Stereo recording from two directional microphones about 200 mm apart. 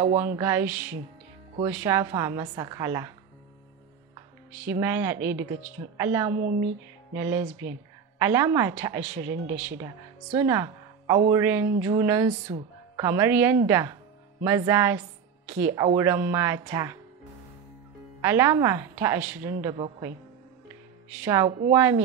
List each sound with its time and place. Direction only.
0.0 s speech: 20° right (ahead or behind)
0.4 s speech: 10° right (ahead or behind)
4.6 s speech: 10° right (ahead or behind)
10.3 s a woman's voice: 15° right (ahead or behind)
18.2 s speech: 10° right (ahead or behind)
19.6 s speech: 20° right (ahead or behind)
21.2 s speech: 10° right (ahead or behind)
21.5 s speech: 25° right (ahead or behind)
21.7 s speech: 10° right (ahead or behind)